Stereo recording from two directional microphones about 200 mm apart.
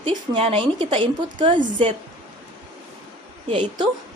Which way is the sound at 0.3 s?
25° right (ahead or behind).